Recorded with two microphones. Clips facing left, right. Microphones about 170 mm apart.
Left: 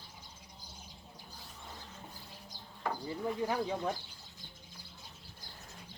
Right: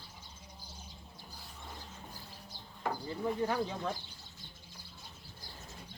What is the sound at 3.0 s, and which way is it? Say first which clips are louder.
Speech: right 1 dB; 10° left (ahead or behind).